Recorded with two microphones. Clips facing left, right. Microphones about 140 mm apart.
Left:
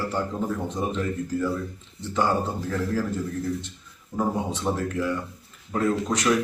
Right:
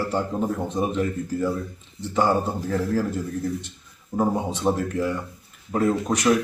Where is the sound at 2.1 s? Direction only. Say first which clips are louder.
Right 3 dB; 20° right (ahead or behind).